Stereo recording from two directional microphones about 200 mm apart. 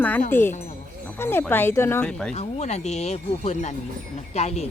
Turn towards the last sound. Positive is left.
turn(degrees=30)  # may be behind; listen again after turning